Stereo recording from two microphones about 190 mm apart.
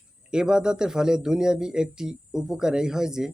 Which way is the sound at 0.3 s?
5° right (ahead or behind).